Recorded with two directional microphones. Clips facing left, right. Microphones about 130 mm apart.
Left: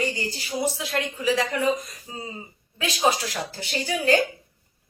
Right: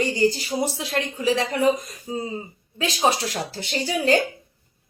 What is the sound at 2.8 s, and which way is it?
Speech, 35° right (ahead or behind).